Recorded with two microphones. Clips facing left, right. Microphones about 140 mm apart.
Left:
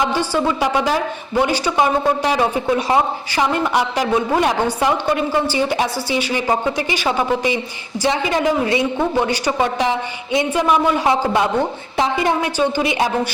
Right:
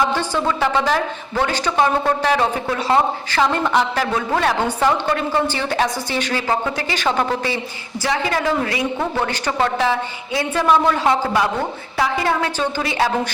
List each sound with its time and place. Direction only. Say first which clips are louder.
0.0 s a man's voice: left 1 dB; 10° left (ahead or behind)